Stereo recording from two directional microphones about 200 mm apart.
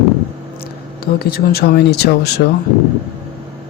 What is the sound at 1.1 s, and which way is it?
Speech, 50° left (ahead or behind).